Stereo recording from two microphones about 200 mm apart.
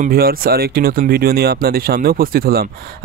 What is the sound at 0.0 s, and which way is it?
Speech, 45° right (ahead or behind).